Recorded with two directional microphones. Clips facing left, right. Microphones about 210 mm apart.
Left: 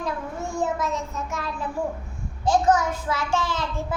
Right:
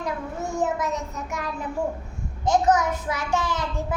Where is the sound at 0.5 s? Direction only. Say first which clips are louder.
Even; 20° right (ahead or behind).